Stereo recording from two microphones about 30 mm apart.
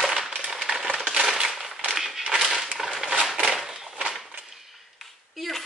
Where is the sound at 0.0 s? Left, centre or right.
Centre.